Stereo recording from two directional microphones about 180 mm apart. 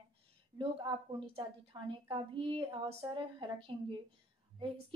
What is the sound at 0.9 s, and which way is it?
A woman's voice, 25° right (ahead or behind).